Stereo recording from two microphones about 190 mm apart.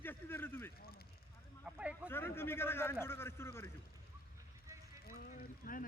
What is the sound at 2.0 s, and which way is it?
A man's voice, 10° left (ahead or behind).